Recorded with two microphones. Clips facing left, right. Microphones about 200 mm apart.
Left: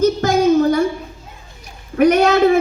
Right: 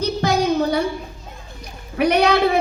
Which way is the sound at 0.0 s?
45° left (ahead or behind).